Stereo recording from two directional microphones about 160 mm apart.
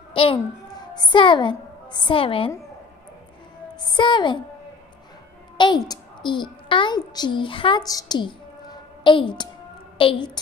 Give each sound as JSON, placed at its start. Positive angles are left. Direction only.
{"t": 0.1, "sound": "a child's voice", "side_deg": 35}
{"t": 3.8, "sound": "a woman's voice", "side_deg": 30}
{"t": 5.6, "sound": "a child's voice", "side_deg": 25}